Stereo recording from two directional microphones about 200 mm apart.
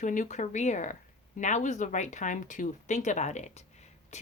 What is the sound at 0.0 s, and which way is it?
Speech, 40° left (ahead or behind).